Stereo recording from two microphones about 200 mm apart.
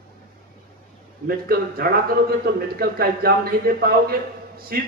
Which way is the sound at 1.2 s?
50° right (ahead or behind).